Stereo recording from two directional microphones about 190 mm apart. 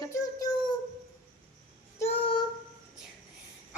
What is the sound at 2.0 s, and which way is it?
Child singing, 30° left (ahead or behind).